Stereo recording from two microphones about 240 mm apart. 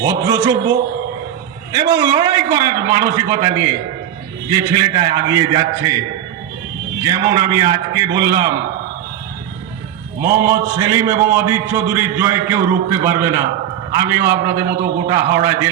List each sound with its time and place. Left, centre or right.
0.0 s a man's voice: centre
7.0 s a man's voice: centre
10.2 s a man's voice: centre